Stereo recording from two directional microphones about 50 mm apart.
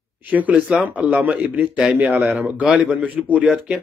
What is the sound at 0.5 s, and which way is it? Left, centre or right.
A man's voice, right.